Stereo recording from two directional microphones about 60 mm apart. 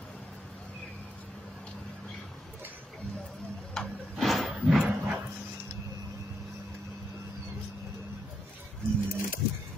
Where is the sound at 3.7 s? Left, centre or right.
Centre.